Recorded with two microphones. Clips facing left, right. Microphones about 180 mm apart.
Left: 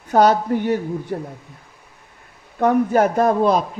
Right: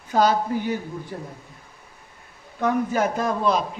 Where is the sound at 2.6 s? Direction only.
55° left (ahead or behind).